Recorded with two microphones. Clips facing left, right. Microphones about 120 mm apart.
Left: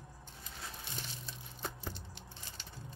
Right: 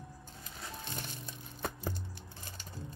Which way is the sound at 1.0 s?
50° right (ahead or behind).